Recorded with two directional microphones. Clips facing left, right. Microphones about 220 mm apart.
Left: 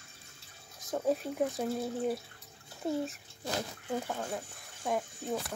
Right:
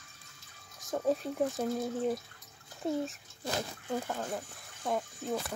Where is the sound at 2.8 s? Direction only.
Centre (ahead or behind).